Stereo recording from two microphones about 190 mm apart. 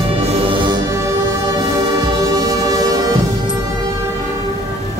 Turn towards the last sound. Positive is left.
turn(degrees=-20)  # may be behind; listen again after turning